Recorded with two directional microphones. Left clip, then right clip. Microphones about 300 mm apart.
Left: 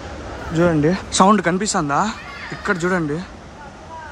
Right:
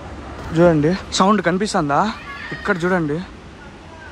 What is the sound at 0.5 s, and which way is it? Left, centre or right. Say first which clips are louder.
Speech: right 3 dB; centre.